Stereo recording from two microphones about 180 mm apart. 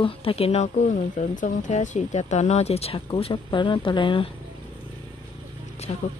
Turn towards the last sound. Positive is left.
turn(degrees=35)  # may be behind; listen again after turning